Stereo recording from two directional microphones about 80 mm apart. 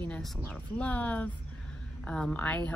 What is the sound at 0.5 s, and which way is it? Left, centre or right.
Speech, centre.